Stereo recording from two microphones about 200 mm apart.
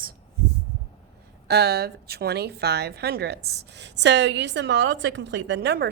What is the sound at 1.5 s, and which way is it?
A woman's voice, 55° right (ahead or behind).